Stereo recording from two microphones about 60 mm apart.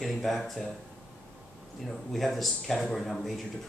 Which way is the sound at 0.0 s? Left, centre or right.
Centre.